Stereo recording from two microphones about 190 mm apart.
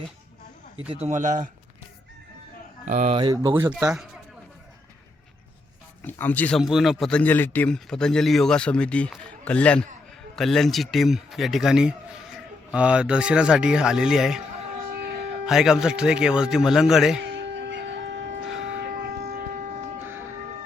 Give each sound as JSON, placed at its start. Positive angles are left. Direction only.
{"t": 0.9, "sound": "a man's voice", "side_deg": -35}
{"t": 2.8, "sound": "a man's voice", "side_deg": -40}
{"t": 3.2, "sound": "speech", "side_deg": -25}
{"t": 3.5, "sound": "speech", "side_deg": -10}
{"t": 6.0, "sound": "speech", "side_deg": 10}
{"t": 14.9, "sound": "music", "side_deg": -55}
{"t": 15.4, "sound": "speech", "side_deg": 0}
{"t": 17.2, "sound": "a sound", "side_deg": -70}
{"t": 18.4, "sound": "a sound", "side_deg": -5}